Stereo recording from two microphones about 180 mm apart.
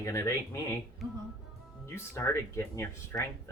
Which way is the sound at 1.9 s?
15° left (ahead or behind).